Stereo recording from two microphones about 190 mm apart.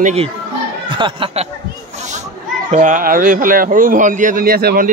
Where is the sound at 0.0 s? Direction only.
35° right (ahead or behind).